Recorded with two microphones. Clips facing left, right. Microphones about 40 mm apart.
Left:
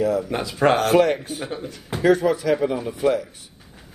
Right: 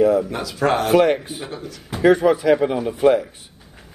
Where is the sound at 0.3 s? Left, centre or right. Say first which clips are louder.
Left 1 dB; left.